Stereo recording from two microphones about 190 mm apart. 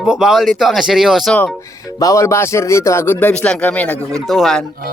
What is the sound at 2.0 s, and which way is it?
Speech, 15° left (ahead or behind).